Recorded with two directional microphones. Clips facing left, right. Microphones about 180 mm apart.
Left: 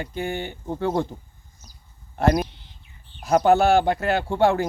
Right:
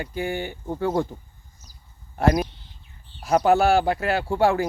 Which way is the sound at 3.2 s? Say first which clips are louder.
Left 1 dB; 5° right (ahead or behind).